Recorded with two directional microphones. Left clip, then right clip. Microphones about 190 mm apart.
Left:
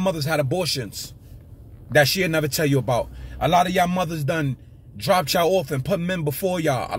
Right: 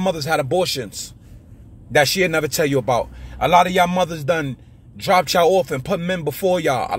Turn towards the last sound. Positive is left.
turn(degrees=20)  # may be behind; listen again after turning